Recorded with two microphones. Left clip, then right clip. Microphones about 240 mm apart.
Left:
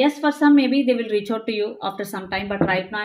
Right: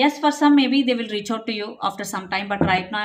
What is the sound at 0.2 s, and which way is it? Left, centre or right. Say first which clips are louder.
Speech: even; right.